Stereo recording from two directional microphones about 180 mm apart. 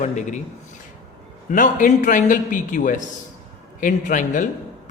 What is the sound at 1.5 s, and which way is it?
A man's voice, 45° left (ahead or behind).